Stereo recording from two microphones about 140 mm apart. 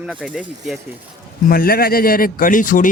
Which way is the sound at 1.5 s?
90° left.